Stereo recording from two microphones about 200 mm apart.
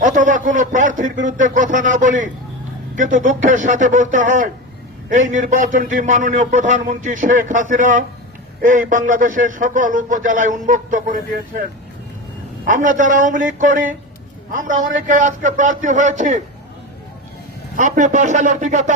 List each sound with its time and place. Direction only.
0.0 s a man's voice: 40° right (ahead or behind)
12.6 s a man's voice: 40° right (ahead or behind)
17.7 s a man's voice: 40° right (ahead or behind)